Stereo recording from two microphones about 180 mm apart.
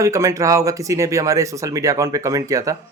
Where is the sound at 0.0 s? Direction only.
15° right (ahead or behind).